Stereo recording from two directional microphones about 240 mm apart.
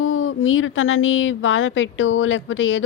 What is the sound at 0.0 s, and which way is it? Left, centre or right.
Speech, left.